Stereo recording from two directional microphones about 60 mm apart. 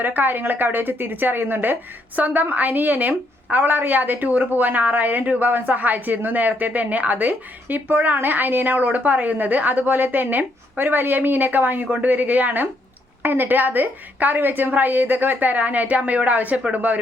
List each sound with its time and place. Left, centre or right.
0.0 s a woman's voice: right